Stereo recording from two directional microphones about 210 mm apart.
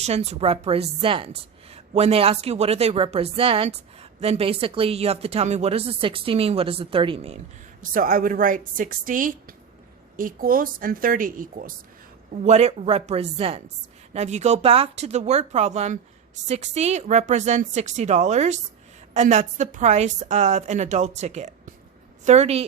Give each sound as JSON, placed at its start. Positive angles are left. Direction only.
{"t": 0.0, "sound": "a woman's voice", "side_deg": -30}
{"t": 7.8, "sound": "a woman's voice", "side_deg": -40}